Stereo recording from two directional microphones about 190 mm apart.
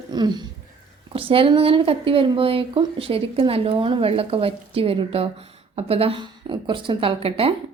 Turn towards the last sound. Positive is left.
turn(degrees=-30)  # may be behind; listen again after turning